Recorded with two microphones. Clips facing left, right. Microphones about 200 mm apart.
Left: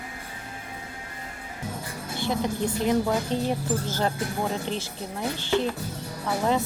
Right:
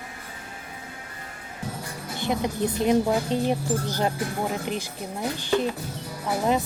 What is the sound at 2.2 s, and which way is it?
Speech, 15° right (ahead or behind).